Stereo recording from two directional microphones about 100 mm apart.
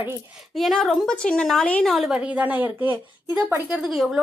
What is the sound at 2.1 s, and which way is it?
Speech, 15° right (ahead or behind).